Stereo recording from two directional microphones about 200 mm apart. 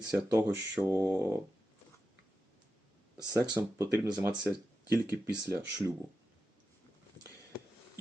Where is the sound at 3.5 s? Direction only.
15° right (ahead or behind).